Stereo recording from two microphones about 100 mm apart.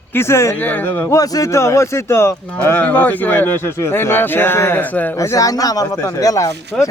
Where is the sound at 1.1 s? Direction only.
35° left (ahead or behind); by 5.1 s 15° left (ahead or behind).